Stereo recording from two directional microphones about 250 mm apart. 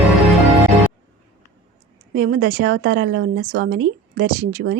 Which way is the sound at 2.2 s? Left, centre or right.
Right.